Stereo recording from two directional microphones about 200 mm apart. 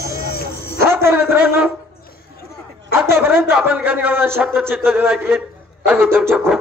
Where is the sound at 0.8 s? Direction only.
10° right (ahead or behind).